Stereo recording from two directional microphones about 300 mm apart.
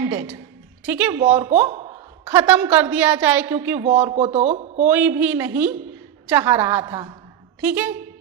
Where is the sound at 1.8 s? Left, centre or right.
Centre.